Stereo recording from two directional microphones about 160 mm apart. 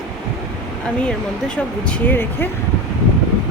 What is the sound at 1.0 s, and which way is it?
Speech, 5° left (ahead or behind).